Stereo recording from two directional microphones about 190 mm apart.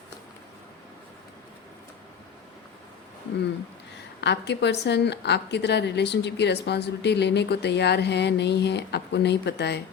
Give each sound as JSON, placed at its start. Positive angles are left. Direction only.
{"t": 4.2, "sound": "a woman's voice", "side_deg": 65}